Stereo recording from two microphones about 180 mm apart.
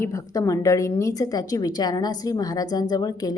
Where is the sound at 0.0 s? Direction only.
15° left (ahead or behind).